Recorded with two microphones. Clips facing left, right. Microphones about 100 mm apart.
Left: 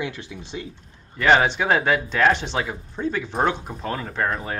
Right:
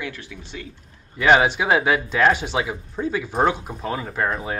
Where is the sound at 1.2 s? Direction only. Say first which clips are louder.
Right 1 dB; 5° right (ahead or behind).